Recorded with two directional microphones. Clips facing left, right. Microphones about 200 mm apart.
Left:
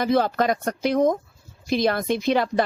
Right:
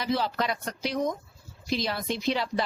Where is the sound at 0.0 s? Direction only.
50° left (ahead or behind).